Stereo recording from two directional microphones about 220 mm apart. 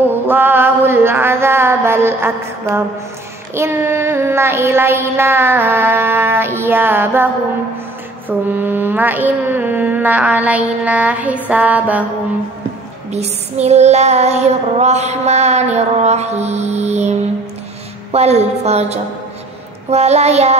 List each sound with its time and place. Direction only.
0.1 s a sound: 10° right (ahead or behind)
3.5 s child singing: 10° right (ahead or behind)
8.3 s child singing: 10° right (ahead or behind)
13.1 s child singing: 30° right (ahead or behind)
18.1 s a woman's voice: 30° right (ahead or behind)